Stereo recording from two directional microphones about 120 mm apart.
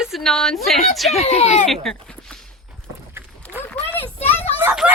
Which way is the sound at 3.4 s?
10° left (ahead or behind).